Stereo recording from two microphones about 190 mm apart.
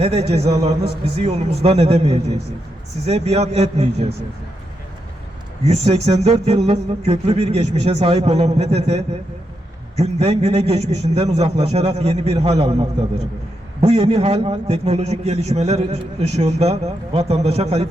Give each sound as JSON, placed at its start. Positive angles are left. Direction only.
{"t": 0.0, "sound": "a man's voice", "side_deg": -35}
{"t": 5.6, "sound": "a man's voice", "side_deg": -35}
{"t": 13.8, "sound": "a man's voice", "side_deg": -30}